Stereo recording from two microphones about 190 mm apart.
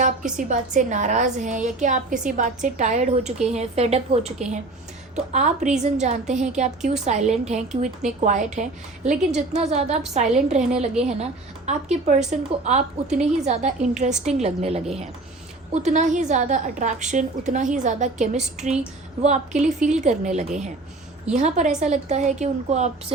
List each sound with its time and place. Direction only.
0.3 s a woman's voice: 40° right (ahead or behind)